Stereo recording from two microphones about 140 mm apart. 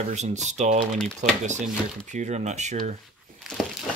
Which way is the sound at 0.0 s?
55° right (ahead or behind).